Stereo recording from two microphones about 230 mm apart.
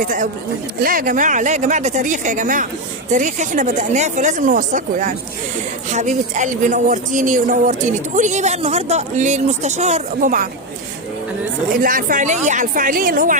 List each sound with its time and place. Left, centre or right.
0.0 s speech: right
11.8 s speech: right